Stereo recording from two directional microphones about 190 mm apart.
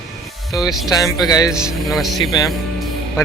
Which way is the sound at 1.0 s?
20° left (ahead or behind).